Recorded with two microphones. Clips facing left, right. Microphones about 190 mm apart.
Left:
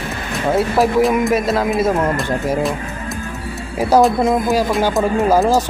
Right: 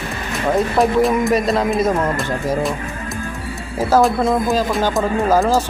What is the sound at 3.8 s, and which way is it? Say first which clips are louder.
Speech: left 2 dB; 15° left (ahead or behind).